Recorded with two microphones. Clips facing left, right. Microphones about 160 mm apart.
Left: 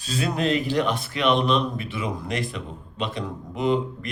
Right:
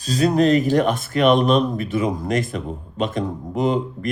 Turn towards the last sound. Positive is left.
turn(degrees=-45)  # may be behind; listen again after turning